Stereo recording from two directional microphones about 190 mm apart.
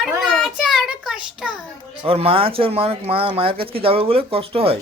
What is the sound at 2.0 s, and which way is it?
Speech, 30° right (ahead or behind).